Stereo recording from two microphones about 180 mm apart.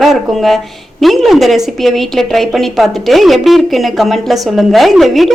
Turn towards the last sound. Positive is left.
turn(degrees=0)  # may be behind; listen again after turning